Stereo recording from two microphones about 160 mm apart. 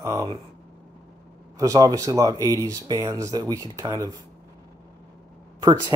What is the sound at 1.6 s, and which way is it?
Speech, 20° right (ahead or behind).